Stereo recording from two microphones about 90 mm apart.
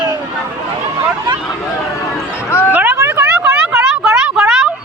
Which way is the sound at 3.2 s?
25° right (ahead or behind).